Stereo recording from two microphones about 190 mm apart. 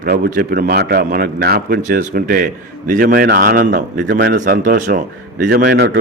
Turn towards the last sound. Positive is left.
turn(degrees=-60)  # may be behind; listen again after turning